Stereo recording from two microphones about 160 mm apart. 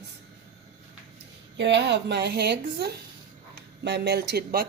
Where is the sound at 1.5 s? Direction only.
90° right.